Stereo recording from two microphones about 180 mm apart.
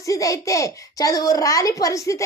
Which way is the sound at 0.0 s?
20° left (ahead or behind).